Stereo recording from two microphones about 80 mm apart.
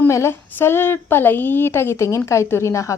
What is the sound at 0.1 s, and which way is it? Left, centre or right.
A woman's voice, left.